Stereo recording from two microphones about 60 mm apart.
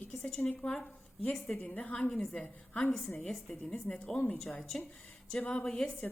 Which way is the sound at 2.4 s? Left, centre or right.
Centre.